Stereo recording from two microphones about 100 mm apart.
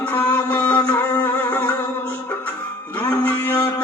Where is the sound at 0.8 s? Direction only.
40° left (ahead or behind).